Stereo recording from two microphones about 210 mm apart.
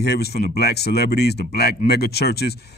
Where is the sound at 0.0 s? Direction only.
50° left (ahead or behind).